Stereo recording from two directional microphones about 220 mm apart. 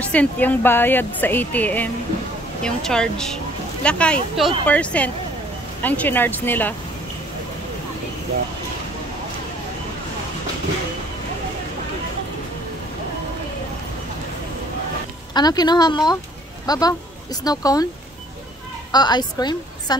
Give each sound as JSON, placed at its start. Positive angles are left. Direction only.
{"t": 0.0, "sound": "speech", "side_deg": 5}
{"t": 15.3, "sound": "speech", "side_deg": 20}
{"t": 18.9, "sound": "a woman's voice", "side_deg": 20}